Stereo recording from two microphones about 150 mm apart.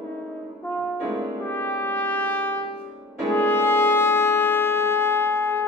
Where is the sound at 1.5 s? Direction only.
10° left (ahead or behind).